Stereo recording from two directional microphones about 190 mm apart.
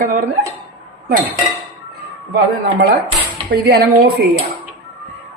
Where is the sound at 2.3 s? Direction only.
55° right (ahead or behind).